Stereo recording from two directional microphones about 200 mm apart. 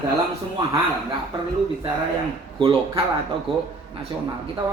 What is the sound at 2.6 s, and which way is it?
Speech, 25° right (ahead or behind).